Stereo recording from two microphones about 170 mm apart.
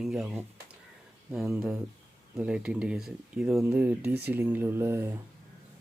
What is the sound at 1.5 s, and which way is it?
Speech, 10° right (ahead or behind).